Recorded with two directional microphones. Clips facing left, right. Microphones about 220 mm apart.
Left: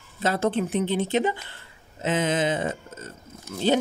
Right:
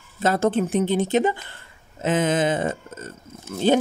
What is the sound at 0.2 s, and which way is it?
Speech, 45° right (ahead or behind).